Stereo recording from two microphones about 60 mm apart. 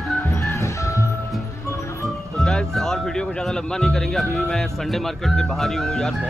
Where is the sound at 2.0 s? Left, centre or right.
Centre.